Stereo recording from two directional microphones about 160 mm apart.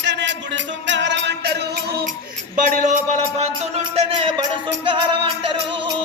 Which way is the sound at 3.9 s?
35° right (ahead or behind).